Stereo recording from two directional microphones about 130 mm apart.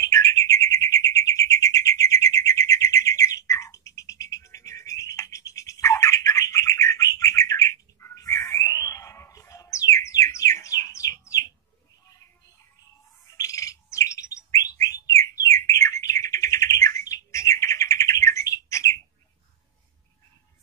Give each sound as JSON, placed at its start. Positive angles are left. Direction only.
{"t": 0.1, "sound": "bird", "side_deg": 25}
{"t": 13.4, "sound": "bird", "side_deg": 25}